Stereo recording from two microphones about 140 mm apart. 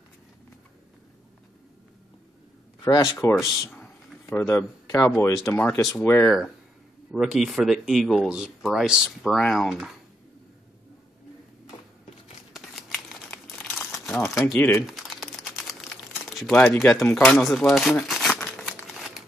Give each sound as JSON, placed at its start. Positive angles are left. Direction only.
{"t": 2.8, "sound": "speech", "side_deg": 20}
{"t": 3.3, "sound": "a sound", "side_deg": 0}
{"t": 5.2, "sound": "speech", "side_deg": 15}
{"t": 6.2, "sound": "speech", "side_deg": 0}
{"t": 12.5, "sound": "crumpling", "side_deg": 0}
{"t": 14.1, "sound": "speech", "side_deg": 0}
{"t": 14.4, "sound": "speech", "side_deg": 15}
{"t": 14.7, "sound": "crumpling", "side_deg": 0}